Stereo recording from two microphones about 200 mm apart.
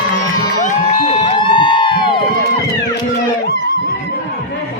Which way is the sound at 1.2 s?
25° left (ahead or behind).